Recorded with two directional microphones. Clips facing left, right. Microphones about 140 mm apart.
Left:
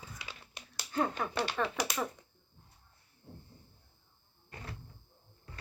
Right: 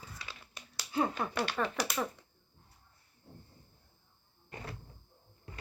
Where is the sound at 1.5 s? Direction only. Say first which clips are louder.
Even; 5° left (ahead or behind).